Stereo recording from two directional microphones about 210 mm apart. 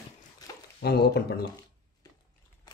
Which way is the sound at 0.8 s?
50° left (ahead or behind).